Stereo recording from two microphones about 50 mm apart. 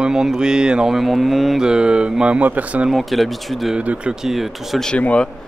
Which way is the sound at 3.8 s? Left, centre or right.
Right.